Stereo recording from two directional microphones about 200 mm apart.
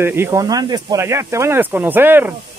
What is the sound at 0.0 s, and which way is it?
Speech, 10° right (ahead or behind).